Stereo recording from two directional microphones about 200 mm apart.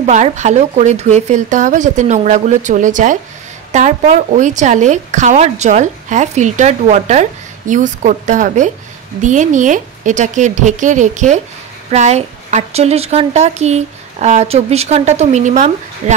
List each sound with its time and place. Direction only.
0.0 s a woman's voice: 35° right (ahead or behind)